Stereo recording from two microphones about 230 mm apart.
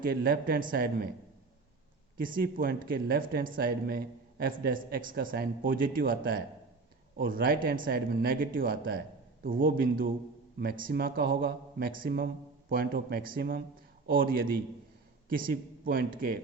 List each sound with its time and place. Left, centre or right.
0.0 s speech: right
2.1 s a man's voice: right